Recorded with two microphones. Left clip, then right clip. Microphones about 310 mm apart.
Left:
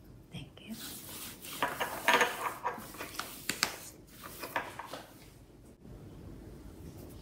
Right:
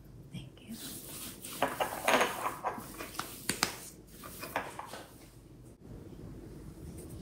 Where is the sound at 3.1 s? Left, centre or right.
Centre.